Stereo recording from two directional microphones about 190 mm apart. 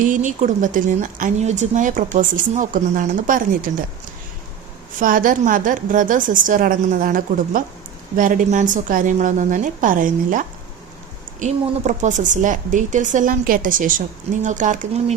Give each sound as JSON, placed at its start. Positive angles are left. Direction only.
{"t": 0.0, "sound": "speech", "side_deg": -40}
{"t": 4.9, "sound": "a woman's voice", "side_deg": -45}